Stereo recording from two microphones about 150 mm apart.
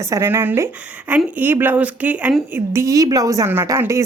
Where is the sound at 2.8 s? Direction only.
25° right (ahead or behind).